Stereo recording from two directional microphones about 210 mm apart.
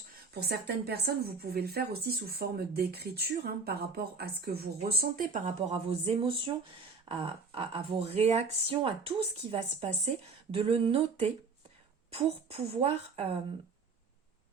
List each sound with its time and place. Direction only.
0.3 s a woman's voice: 50° right (ahead or behind)
5.5 s speech: 25° right (ahead or behind)